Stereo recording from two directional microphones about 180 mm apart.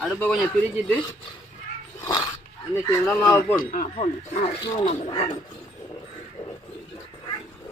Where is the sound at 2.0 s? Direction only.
25° left (ahead or behind).